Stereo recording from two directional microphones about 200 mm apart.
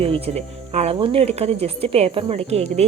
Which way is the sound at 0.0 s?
30° right (ahead or behind).